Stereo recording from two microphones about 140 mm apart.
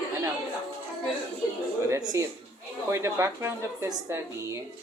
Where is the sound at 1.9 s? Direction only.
25° right (ahead or behind).